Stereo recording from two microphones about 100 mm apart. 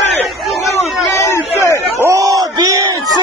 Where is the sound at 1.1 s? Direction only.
30° left (ahead or behind).